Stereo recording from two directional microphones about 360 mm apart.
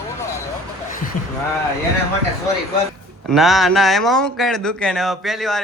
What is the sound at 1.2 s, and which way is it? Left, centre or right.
Speech, left.